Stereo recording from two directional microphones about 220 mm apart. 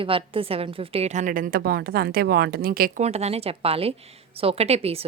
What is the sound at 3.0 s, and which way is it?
Speech, 30° right (ahead or behind).